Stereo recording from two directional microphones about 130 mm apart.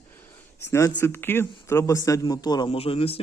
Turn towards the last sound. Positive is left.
turn(degrees=50)  # may be behind; listen again after turning